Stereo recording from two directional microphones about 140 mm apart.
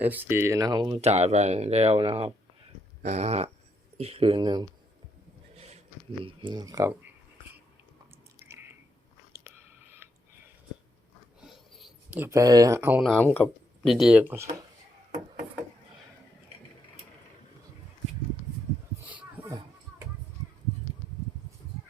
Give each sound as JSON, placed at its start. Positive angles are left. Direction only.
{"t": 0.0, "sound": "speech", "side_deg": -15}
{"t": 1.0, "sound": "speech", "side_deg": -50}
{"t": 3.0, "sound": "speech", "side_deg": -55}
{"t": 5.5, "sound": "a sound", "side_deg": -50}
{"t": 6.2, "sound": "speech", "side_deg": -35}
{"t": 8.4, "sound": "squish", "side_deg": -15}
{"t": 11.3, "sound": "a sound", "side_deg": 0}
{"t": 12.1, "sound": "speech", "side_deg": -20}
{"t": 13.0, "sound": "speech", "side_deg": 0}
{"t": 13.2, "sound": "speech", "side_deg": 15}
{"t": 13.8, "sound": "speech", "side_deg": 0}
{"t": 19.0, "sound": "a sound", "side_deg": -10}